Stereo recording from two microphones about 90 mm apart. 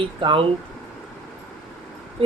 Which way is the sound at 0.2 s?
75° right (ahead or behind).